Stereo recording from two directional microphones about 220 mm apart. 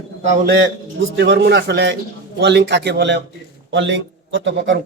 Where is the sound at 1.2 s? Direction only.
50° right (ahead or behind).